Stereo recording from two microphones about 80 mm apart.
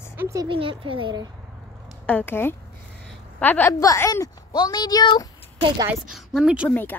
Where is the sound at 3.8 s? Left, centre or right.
Left.